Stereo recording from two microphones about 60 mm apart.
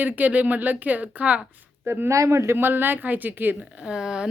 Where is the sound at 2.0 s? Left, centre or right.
Right.